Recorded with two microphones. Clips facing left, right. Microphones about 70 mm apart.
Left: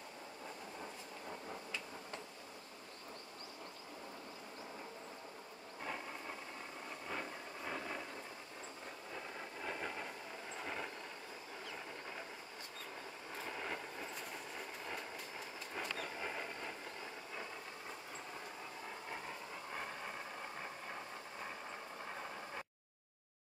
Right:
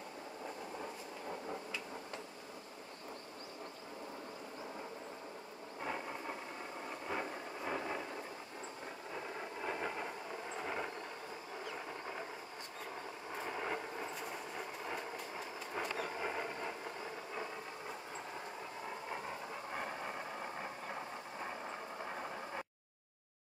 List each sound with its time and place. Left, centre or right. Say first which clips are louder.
5.9 s vehicle: right 4 dB; centre
7.1 s a sound: right 4 dB; centre
9.1 s a sound: right 4 dB; centre
13.4 s vehicle: right 4 dB; centre
15.9 s vehicle: right 4 dB; centre
19.7 s vehicle: right 3 dB; centre